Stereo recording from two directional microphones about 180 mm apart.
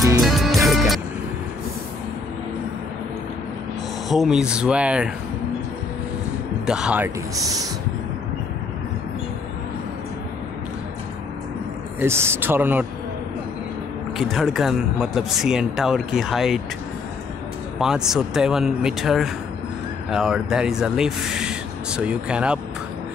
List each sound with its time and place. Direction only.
0.2 s music: centre (ahead or behind)
4.1 s speech: centre (ahead or behind)
6.6 s speech: 5° right (ahead or behind)
12.0 s speech: 15° right (ahead or behind)
14.1 s speech: centre (ahead or behind)
17.7 s speech: 5° right (ahead or behind)